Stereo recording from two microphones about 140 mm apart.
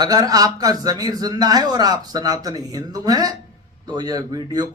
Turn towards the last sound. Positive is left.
turn(degrees=-30)  # may be behind; listen again after turning